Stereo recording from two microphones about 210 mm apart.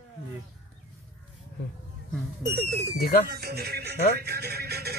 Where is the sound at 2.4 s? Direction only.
55° right (ahead or behind).